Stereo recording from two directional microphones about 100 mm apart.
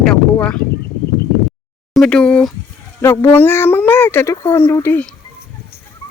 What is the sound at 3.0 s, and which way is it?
Speech, 25° left (ahead or behind).